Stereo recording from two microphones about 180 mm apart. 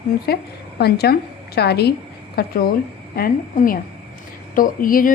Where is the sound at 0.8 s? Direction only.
60° left (ahead or behind).